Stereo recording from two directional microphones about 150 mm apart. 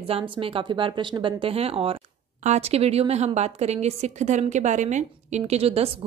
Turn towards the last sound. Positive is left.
turn(degrees=-40)  # may be behind; listen again after turning